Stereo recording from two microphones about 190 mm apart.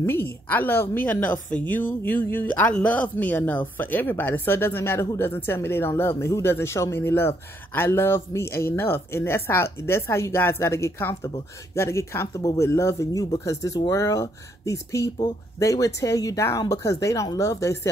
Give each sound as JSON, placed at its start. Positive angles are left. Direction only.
{"t": 0.0, "sound": "speech", "side_deg": 10}